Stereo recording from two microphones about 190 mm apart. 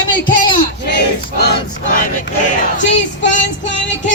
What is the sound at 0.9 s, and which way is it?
Battle cry, 60° left (ahead or behind).